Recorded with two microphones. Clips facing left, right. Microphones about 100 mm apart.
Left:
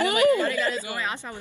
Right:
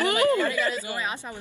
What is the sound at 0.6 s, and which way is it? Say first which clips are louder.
Speech: even; 25° left (ahead or behind).